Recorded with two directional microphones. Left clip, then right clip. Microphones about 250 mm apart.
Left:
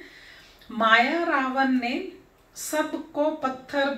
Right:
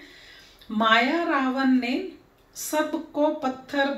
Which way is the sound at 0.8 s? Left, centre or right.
Centre.